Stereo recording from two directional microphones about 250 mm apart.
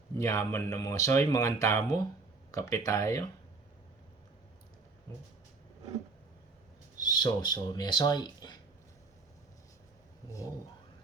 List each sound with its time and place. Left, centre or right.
0.2 s speech: centre
7.1 s speech: centre